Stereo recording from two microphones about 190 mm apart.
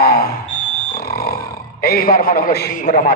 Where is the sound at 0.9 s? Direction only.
55° left (ahead or behind).